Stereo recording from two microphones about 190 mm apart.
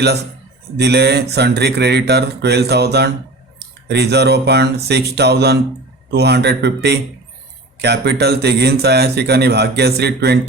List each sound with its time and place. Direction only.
0.8 s a man's voice: 60° right (ahead or behind)